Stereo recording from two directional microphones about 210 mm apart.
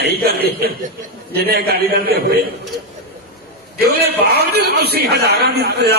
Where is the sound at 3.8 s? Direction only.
50° right (ahead or behind).